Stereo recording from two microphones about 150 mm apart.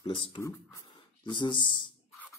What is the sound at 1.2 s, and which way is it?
Speech, 30° left (ahead or behind).